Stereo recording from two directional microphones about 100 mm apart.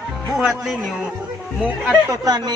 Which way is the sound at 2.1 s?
40° right (ahead or behind).